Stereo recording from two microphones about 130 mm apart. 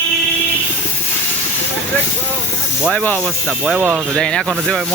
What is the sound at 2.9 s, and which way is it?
Speech, 15° left (ahead or behind).